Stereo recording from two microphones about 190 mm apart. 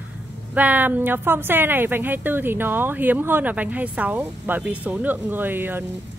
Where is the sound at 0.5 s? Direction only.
10° right (ahead or behind).